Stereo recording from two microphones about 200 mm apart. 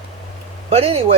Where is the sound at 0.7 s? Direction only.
30° right (ahead or behind).